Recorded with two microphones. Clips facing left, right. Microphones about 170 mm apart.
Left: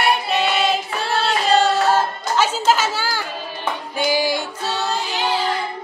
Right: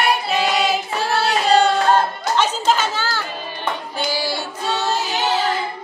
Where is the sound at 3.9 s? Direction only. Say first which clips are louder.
Left 6 dB; 15° left (ahead or behind).